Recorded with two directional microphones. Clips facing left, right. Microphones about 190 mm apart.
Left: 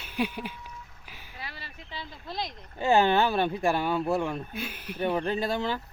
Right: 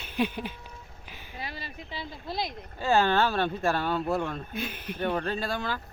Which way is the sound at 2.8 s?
20° left (ahead or behind).